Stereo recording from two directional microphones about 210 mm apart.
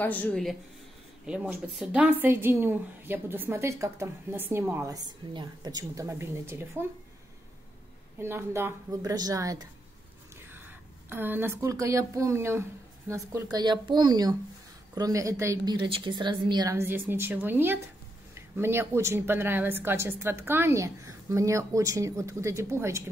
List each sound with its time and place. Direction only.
0.0 s a woman's voice: 5° left (ahead or behind); by 6.8 s 10° right (ahead or behind)
8.2 s a woman's voice: 10° right (ahead or behind)